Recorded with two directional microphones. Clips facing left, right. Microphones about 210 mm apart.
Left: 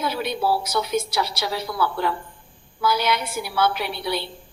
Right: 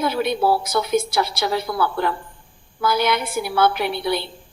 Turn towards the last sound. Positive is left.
turn(degrees=-55)  # may be behind; listen again after turning